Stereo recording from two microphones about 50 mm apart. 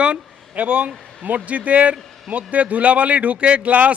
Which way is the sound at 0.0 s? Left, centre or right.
Right.